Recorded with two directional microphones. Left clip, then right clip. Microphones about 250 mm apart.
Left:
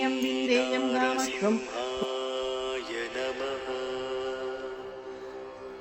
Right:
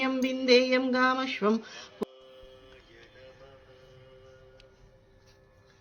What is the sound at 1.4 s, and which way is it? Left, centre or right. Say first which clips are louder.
Speech: right 1 dB; centre.